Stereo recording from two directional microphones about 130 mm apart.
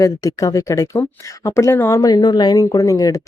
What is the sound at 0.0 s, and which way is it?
Speech, 25° left (ahead or behind).